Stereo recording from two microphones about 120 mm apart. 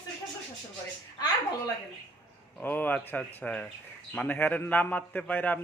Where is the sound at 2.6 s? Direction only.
15° left (ahead or behind).